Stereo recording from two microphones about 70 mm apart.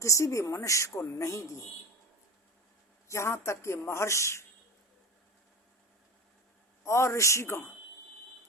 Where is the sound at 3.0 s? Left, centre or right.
Left.